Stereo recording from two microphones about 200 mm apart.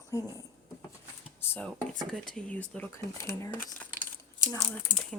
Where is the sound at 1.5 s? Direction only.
5° left (ahead or behind).